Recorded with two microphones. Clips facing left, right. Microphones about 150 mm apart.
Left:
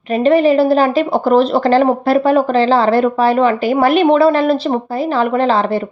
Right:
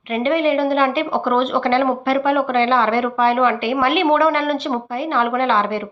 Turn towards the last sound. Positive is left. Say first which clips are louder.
# left 4 dB
turn(degrees=35)  # may be behind; listen again after turning